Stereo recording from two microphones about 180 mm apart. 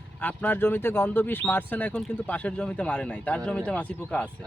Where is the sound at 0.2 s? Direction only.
10° left (ahead or behind).